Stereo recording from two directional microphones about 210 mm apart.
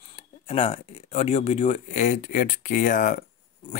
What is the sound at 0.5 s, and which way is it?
Speech, 30° left (ahead or behind).